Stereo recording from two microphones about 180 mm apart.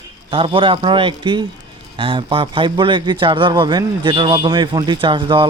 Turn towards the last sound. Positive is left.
turn(degrees=-25)  # may be behind; listen again after turning